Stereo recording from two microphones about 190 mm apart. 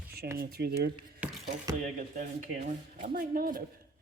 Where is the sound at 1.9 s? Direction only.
45° right (ahead or behind).